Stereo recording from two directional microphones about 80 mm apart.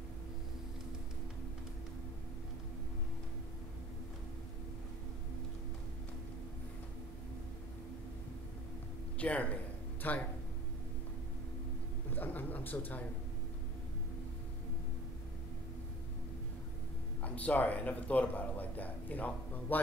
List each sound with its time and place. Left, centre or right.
9.2 s a man's voice: centre
12.1 s a sound: left
17.2 s speech: centre